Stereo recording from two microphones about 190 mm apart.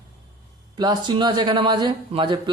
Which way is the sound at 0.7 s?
20° right (ahead or behind).